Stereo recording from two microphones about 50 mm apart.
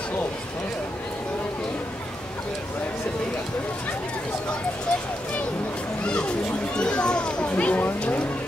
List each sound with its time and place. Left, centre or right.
6.8 s children playing: centre